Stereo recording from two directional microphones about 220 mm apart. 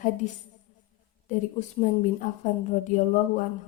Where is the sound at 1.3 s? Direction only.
35° left (ahead or behind).